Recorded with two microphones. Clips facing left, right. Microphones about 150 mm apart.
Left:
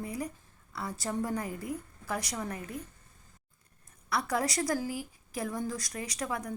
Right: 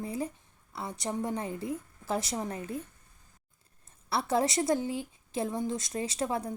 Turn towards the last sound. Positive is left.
turn(degrees=-30)  # may be behind; listen again after turning